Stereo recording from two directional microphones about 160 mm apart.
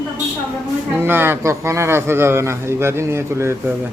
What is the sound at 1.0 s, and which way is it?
A man's voice, 15° right (ahead or behind).